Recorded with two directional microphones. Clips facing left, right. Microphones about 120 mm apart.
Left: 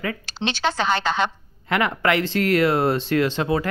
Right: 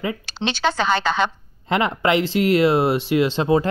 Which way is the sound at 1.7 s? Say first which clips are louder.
Right 2 dB; 20° right (ahead or behind).